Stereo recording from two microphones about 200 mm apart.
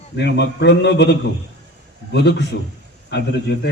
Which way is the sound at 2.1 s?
60° left (ahead or behind).